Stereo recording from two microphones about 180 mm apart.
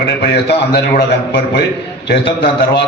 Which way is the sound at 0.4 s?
65° left (ahead or behind).